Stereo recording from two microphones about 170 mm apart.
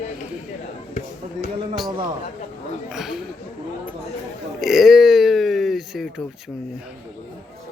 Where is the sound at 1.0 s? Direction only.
50° left (ahead or behind).